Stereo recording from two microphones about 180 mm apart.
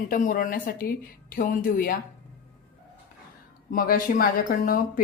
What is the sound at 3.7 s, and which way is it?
A woman's voice, 50° left (ahead or behind).